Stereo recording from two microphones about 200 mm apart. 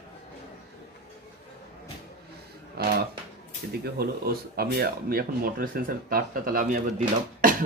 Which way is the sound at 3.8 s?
50° right (ahead or behind).